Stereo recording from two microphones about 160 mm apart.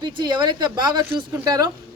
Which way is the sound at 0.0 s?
25° right (ahead or behind).